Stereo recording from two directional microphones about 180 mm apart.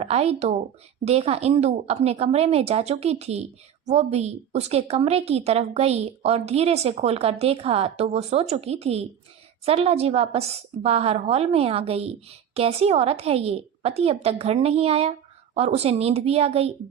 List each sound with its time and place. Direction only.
0.0 s a woman's voice: 35° right (ahead or behind)